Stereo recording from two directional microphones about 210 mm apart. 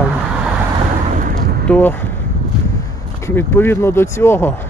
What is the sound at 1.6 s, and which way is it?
Speech, 5° left (ahead or behind).